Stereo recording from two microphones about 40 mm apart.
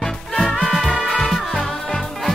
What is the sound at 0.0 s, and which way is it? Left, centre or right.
Music, centre.